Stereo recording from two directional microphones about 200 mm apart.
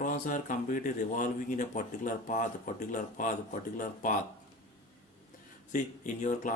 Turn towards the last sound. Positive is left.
turn(degrees=40)  # may be behind; listen again after turning